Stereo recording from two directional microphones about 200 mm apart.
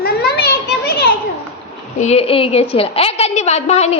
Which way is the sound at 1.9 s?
30° left (ahead or behind).